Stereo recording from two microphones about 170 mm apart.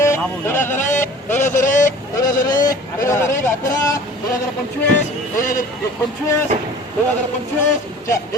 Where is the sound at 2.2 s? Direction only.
20° left (ahead or behind).